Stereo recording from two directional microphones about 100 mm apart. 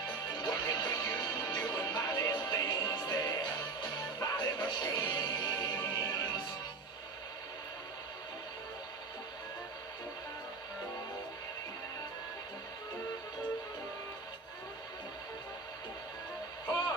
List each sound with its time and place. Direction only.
0.0 s music: 45° left (ahead or behind)